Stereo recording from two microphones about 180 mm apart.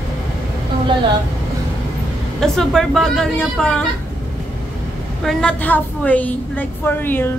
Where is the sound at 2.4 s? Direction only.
Centre (ahead or behind).